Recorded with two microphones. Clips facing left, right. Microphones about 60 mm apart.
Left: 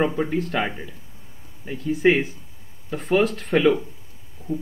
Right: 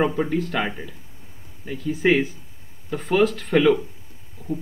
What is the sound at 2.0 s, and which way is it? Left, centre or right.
Speech, centre.